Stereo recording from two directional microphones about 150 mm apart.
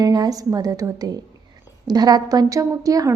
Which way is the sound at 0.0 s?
25° right (ahead or behind).